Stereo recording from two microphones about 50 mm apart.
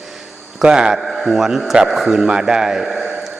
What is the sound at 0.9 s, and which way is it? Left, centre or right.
A man's voice, centre.